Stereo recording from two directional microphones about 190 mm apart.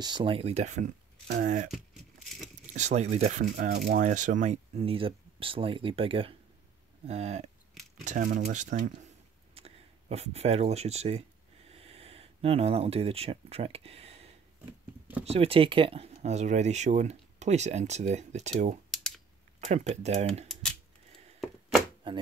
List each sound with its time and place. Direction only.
0.0 s speech: 25° right (ahead or behind)
3.7 s speech: 55° right (ahead or behind)
4.0 s speech: 40° right (ahead or behind)
18.9 s computer keyboard: centre (ahead or behind)
19.7 s speech: 35° right (ahead or behind)
22.0 s a sound: 25° right (ahead or behind)